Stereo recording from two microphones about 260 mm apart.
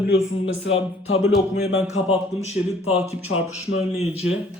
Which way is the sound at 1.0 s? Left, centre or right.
Left.